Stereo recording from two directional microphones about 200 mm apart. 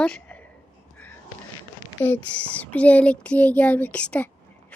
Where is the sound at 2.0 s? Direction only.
10° left (ahead or behind).